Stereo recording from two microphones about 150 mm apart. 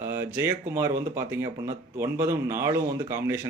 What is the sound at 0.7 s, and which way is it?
Speech, 15° right (ahead or behind).